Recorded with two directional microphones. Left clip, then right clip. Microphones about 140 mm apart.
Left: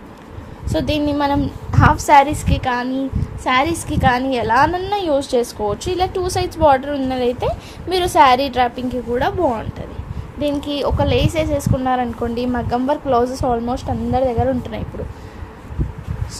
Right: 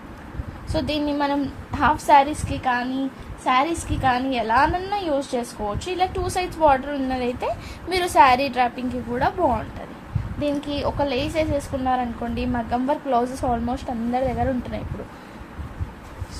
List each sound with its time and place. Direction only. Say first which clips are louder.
0.7 s a woman's voice: left 5 dB; 40° left (ahead or behind); by 2.9 s 60° left (ahead or behind)
3.4 s a woman's voice: left 3 dB; 70° left (ahead or behind); by 9.6 s 40° left (ahead or behind)
10.4 s a woman's voice: left 5 dB; 55° left (ahead or behind); by 14.8 s 35° left (ahead or behind)